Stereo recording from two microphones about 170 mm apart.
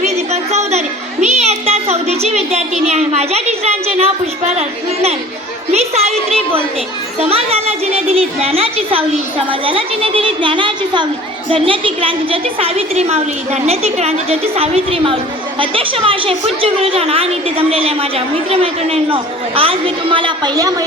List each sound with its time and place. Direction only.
0.0 s a sound: 40° right (ahead or behind)
2.8 s a woman's voice: 40° right (ahead or behind)
5.7 s a woman's voice: 40° right (ahead or behind)